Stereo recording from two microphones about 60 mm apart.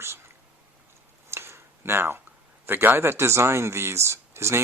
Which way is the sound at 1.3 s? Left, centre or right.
Right.